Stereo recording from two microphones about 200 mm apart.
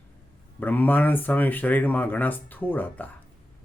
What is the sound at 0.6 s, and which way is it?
Speech, 10° left (ahead or behind).